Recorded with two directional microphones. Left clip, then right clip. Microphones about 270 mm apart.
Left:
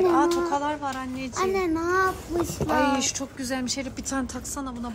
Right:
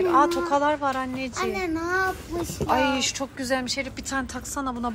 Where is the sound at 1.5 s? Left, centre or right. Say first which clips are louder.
Left 3 dB; left.